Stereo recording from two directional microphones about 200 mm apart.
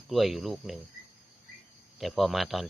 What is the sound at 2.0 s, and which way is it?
Speech, centre (ahead or behind).